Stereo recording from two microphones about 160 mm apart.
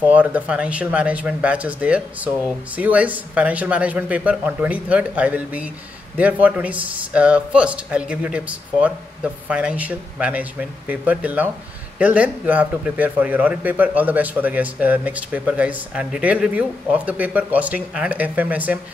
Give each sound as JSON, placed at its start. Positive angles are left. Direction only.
{"t": 0.0, "sound": "a man's voice", "side_deg": -10}